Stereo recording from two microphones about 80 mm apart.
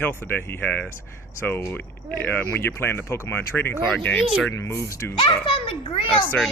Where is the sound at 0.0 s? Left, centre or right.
Left.